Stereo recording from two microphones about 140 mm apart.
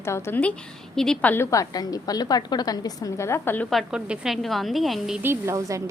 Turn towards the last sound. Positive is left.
turn(degrees=-20)  # may be behind; listen again after turning